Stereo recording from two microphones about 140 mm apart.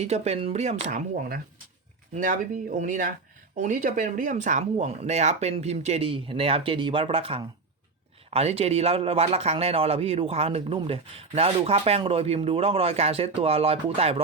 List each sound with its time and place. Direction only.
0.0 s speech: 50° right (ahead or behind)
2.1 s speech: 65° right (ahead or behind); by 14.2 s 45° right (ahead or behind)